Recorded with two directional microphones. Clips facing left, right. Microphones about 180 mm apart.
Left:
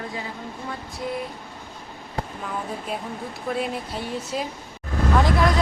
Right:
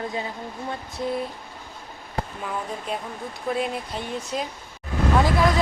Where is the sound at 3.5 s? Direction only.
Centre (ahead or behind).